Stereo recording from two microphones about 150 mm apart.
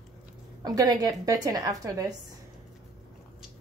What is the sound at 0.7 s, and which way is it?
A woman's voice, 25° right (ahead or behind).